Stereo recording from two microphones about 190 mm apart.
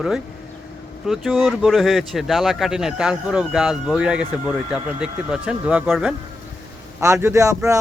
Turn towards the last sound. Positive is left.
turn(degrees=-15)  # may be behind; listen again after turning